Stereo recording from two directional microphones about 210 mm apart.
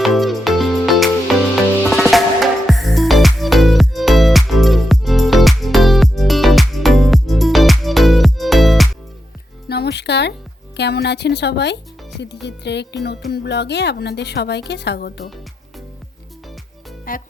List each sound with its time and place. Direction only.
0.0 s music: centre (ahead or behind)
9.6 s music: 50° left (ahead or behind)
10.8 s a woman's voice: 50° left (ahead or behind)
17.1 s music: 40° left (ahead or behind)